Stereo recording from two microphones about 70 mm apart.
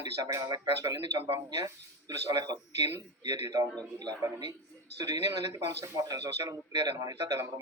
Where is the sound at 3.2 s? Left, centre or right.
Right.